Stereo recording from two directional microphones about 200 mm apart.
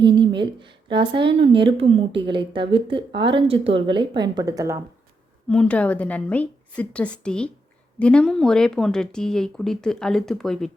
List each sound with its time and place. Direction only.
0.0 s speech: 25° right (ahead or behind)
5.5 s a woman's voice: 5° left (ahead or behind)